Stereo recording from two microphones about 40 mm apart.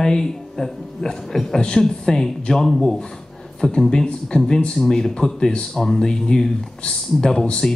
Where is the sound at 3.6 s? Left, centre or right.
Centre.